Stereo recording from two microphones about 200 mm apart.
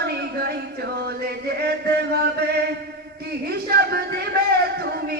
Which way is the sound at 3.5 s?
55° right (ahead or behind).